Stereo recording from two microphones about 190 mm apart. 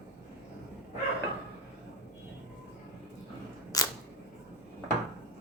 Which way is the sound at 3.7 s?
20° left (ahead or behind).